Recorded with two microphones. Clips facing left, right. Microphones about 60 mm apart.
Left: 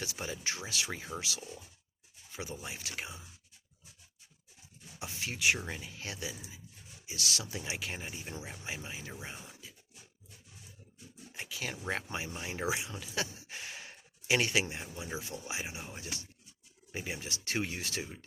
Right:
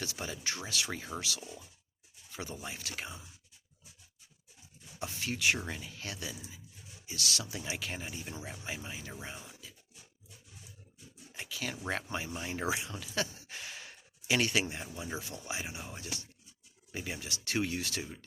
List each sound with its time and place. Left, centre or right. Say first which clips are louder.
0.0 s speech: even; left
1.1 s speech: even; centre
2.3 s speech: even; left
4.9 s a sound: right 2 dB; left
5.6 s speech: even; centre
11.3 s speech: right 1 dB; left